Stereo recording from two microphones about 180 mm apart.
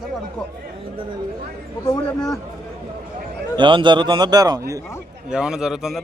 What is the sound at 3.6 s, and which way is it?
A man's voice, 25° right (ahead or behind).